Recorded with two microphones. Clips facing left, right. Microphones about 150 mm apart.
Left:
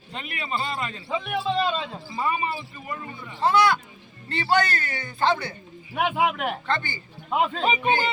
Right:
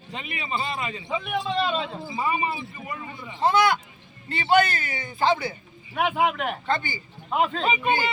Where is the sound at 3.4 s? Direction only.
20° right (ahead or behind).